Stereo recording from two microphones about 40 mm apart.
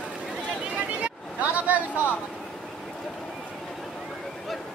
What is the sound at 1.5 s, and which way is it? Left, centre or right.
Vehicle, right.